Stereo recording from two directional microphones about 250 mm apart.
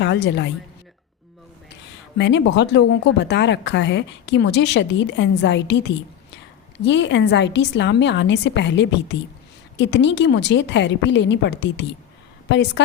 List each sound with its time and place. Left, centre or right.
0.0 s a woman's voice: left
2.1 s speech: left